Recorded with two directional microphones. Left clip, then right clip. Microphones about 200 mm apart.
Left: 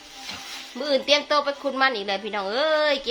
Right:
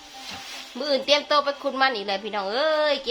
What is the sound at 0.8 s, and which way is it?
A woman's voice, 10° right (ahead or behind).